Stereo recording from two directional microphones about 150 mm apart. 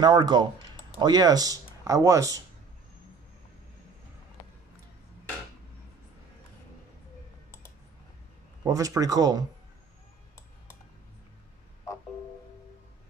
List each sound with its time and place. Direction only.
0.0 s speech: 30° right (ahead or behind)
8.6 s speech: 25° right (ahead or behind)